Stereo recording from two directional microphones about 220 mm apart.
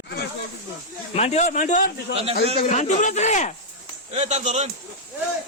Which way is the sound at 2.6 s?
35° left (ahead or behind).